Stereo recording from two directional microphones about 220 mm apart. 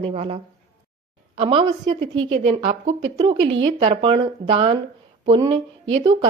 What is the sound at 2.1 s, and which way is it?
Speech, 60° right (ahead or behind).